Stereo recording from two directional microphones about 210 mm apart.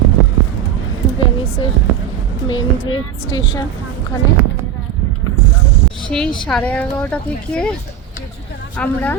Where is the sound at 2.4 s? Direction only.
20° left (ahead or behind).